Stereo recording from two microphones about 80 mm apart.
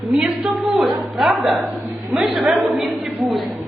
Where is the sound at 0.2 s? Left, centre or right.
Centre.